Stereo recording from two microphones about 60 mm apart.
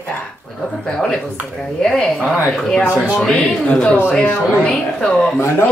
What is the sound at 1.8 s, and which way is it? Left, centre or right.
Speech, centre.